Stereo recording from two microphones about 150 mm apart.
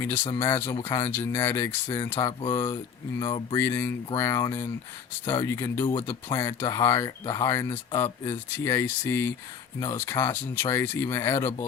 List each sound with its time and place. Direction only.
0.0 s speech: 15° left (ahead or behind)
3.6 s speech: 15° left (ahead or behind)